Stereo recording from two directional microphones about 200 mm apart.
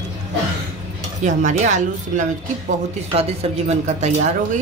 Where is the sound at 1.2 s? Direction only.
40° right (ahead or behind).